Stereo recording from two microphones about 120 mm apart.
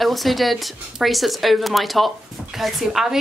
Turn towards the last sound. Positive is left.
turn(degrees=-5)  # may be behind; listen again after turning